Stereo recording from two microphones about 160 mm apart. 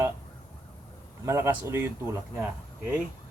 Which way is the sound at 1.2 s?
15° right (ahead or behind).